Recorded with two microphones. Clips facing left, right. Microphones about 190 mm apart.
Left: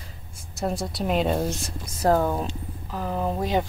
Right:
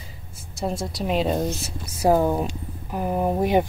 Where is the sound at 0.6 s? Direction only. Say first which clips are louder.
Even; centre (ahead or behind).